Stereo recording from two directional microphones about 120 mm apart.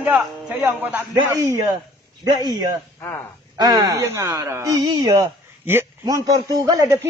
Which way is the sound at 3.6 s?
35° right (ahead or behind).